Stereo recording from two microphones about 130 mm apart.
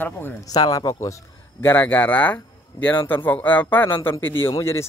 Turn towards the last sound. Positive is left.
turn(degrees=20)  # may be behind; listen again after turning